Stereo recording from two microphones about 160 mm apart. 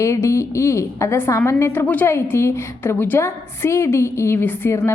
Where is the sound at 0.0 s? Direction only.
20° left (ahead or behind).